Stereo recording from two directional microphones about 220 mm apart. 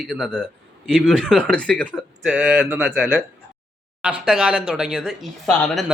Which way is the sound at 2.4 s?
5° right (ahead or behind).